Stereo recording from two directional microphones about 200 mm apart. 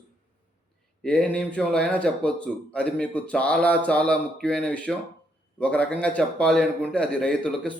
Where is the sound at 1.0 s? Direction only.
5° left (ahead or behind).